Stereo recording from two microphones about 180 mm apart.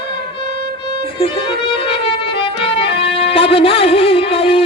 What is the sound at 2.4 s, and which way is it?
Music, 30° left (ahead or behind).